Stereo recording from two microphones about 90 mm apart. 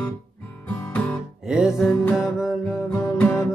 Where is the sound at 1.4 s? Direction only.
5° right (ahead or behind).